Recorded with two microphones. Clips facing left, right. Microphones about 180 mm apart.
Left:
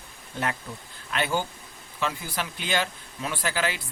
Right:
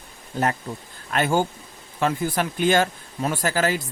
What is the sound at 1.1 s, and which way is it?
Speech, 45° right (ahead or behind).